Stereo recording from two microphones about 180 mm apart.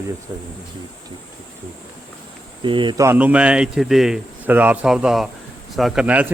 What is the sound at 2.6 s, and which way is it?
Speech, 25° right (ahead or behind).